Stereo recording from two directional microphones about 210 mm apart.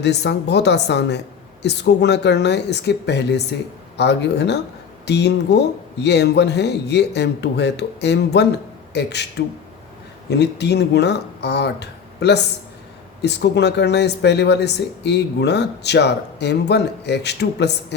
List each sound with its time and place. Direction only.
0.0 s a woman's voice: 55° left (ahead or behind)
10.2 s speech: 55° left (ahead or behind)